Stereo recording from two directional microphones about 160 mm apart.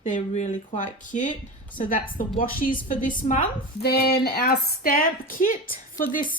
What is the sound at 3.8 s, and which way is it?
A woman's voice, 90° left.